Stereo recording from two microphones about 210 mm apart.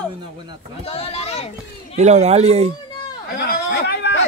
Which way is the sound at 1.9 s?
35° right (ahead or behind).